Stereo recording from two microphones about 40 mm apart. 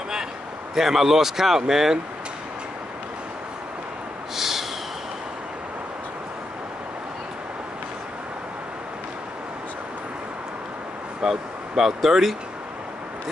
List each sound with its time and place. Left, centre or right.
0.7 s a man's voice: centre
4.4 s snort: centre
11.2 s speech: centre